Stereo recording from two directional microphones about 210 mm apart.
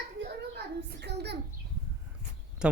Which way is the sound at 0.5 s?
50° right (ahead or behind).